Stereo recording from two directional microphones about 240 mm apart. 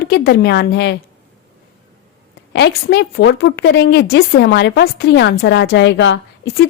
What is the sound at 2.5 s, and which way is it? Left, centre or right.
A woman's voice, left.